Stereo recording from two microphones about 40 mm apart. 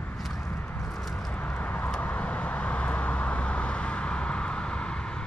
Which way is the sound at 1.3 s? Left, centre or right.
Left.